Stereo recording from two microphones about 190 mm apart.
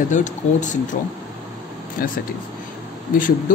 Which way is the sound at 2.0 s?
50° left (ahead or behind).